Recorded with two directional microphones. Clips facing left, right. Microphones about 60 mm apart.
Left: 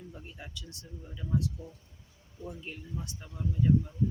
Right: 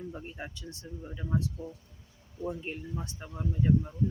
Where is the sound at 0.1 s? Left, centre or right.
Right.